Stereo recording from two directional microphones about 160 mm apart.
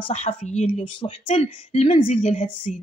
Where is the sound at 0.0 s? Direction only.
40° left (ahead or behind).